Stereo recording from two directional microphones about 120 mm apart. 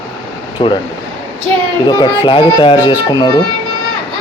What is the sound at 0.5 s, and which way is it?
Speech, 40° left (ahead or behind).